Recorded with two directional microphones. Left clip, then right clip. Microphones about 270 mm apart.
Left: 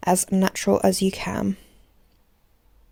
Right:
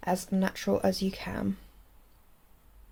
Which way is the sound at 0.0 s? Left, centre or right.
Left.